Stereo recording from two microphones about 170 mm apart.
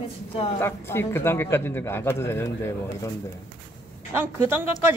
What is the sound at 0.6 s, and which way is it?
A man's voice, 15° left (ahead or behind).